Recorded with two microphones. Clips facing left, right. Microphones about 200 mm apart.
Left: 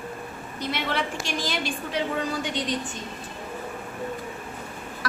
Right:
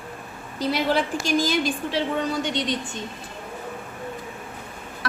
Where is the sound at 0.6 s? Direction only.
35° right (ahead or behind).